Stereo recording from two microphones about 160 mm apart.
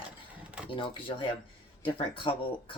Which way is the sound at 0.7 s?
30° left (ahead or behind).